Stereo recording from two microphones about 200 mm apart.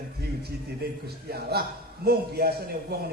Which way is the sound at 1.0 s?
50° right (ahead or behind).